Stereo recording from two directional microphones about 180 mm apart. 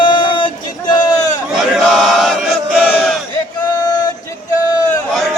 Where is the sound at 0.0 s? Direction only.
25° left (ahead or behind).